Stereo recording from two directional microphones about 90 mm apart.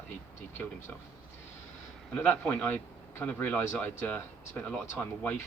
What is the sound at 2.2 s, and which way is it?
A man's voice, 15° left (ahead or behind).